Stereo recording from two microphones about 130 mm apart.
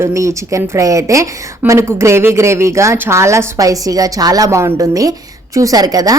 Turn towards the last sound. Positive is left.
turn(degrees=-30)  # may be behind; listen again after turning